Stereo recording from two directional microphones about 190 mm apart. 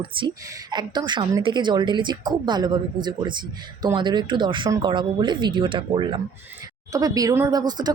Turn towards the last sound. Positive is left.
turn(degrees=-20)  # may be behind; listen again after turning